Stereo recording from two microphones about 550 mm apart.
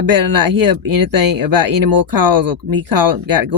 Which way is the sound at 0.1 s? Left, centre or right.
Right.